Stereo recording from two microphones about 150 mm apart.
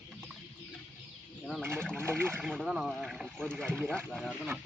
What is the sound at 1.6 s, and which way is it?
Speech, 15° right (ahead or behind).